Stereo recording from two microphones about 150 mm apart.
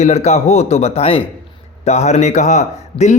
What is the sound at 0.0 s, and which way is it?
A man's voice, 45° left (ahead or behind).